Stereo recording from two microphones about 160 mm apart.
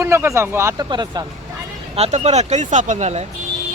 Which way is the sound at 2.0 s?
45° right (ahead or behind).